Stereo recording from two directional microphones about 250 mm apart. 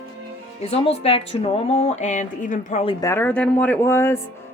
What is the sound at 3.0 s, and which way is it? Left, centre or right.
Speech, centre.